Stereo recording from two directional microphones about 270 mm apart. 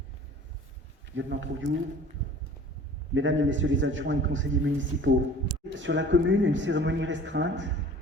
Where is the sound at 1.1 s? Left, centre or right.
Right.